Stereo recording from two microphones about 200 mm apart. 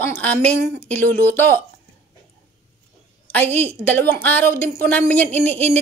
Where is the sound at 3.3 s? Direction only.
10° left (ahead or behind).